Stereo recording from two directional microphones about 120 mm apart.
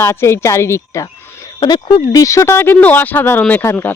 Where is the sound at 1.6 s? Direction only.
35° left (ahead or behind).